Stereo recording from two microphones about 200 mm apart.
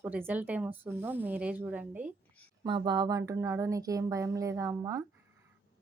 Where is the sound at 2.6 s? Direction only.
20° right (ahead or behind).